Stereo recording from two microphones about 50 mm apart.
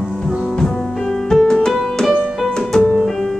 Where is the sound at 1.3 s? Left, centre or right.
Centre.